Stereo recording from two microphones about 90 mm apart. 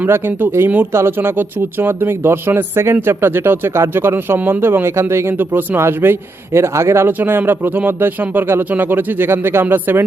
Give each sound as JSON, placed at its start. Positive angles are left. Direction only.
{"t": 0.0, "sound": "speech", "side_deg": -20}